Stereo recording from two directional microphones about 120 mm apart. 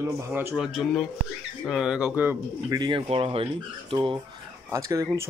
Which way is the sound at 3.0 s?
55° right (ahead or behind).